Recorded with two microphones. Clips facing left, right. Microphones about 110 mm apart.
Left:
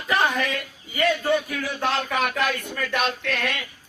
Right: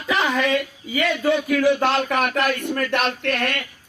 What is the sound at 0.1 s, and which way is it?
Speech, 90° right.